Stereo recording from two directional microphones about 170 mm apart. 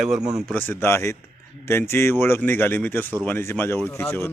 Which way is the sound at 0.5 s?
10° left (ahead or behind).